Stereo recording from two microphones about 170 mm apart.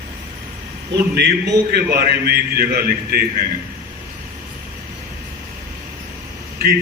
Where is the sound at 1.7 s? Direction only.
65° right (ahead or behind).